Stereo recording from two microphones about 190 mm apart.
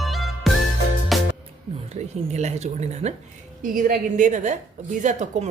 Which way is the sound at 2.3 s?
35° right (ahead or behind).